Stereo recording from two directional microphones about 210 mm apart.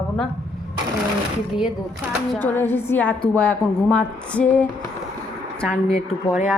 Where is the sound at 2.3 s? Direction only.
10° left (ahead or behind).